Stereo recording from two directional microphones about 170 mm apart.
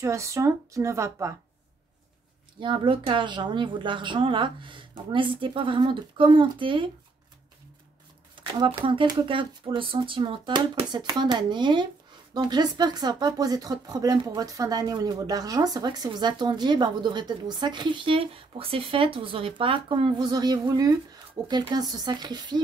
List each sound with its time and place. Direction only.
0.0 s speech: 20° right (ahead or behind)
2.6 s speech: 30° right (ahead or behind)
8.4 s speech: 30° right (ahead or behind)